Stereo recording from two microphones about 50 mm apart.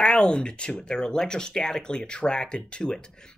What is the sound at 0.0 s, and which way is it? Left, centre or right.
Speech, centre.